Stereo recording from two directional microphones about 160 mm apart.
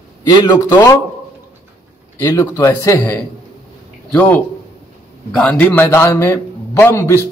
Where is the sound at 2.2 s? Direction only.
20° left (ahead or behind).